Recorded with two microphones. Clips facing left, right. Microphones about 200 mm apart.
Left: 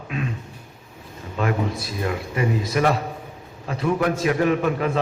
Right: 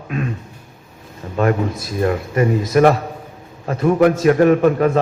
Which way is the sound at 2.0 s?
45° right (ahead or behind).